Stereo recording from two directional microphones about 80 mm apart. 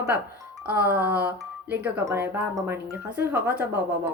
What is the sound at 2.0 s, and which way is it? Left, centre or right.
Speech, right.